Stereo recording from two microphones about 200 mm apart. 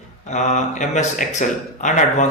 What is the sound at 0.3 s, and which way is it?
Speech, 35° left (ahead or behind).